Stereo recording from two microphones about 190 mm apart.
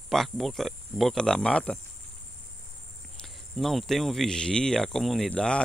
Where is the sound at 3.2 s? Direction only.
Centre (ahead or behind).